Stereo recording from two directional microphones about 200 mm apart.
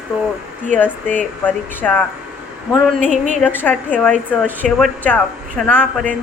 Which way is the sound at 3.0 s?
35° right (ahead or behind).